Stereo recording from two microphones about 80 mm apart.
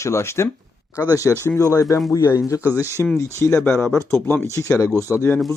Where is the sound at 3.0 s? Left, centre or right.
Left.